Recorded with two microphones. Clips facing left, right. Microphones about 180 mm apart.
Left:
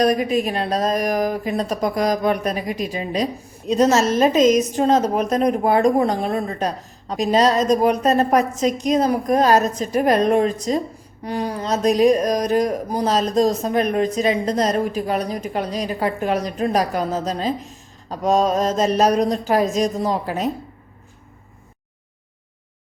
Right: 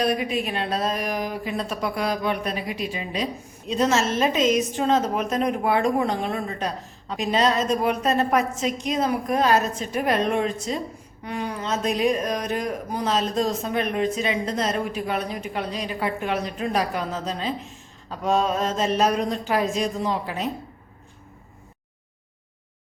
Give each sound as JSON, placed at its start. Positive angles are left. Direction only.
{"t": 0.0, "sound": "speech", "side_deg": 40}